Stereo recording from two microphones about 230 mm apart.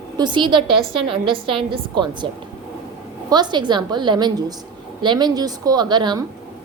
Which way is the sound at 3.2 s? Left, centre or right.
Centre.